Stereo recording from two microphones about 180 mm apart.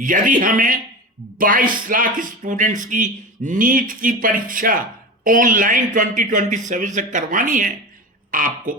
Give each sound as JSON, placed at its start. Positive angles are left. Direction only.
{"t": 0.0, "sound": "speech", "side_deg": -45}